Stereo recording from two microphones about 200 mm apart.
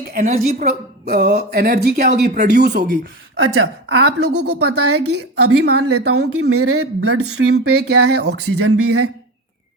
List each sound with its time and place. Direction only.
0.1 s speech: 40° right (ahead or behind)
1.0 s a sound: 55° right (ahead or behind)
3.3 s a woman's voice: 90° right; by 4.4 s 55° right (ahead or behind)
4.8 s a woman's voice: 90° right